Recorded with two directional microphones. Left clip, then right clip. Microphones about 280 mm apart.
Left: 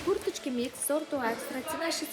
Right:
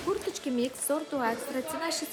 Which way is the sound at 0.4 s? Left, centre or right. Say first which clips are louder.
Right 2 dB; centre.